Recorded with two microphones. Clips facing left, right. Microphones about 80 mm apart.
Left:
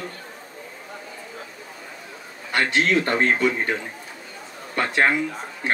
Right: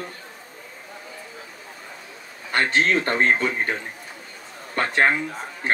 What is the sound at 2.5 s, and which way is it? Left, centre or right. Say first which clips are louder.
A man's voice: even; right.